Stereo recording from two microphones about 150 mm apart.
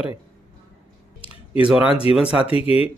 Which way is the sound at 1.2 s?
35° left (ahead or behind).